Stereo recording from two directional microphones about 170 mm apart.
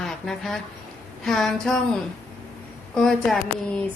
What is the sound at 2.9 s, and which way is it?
Speech, centre (ahead or behind).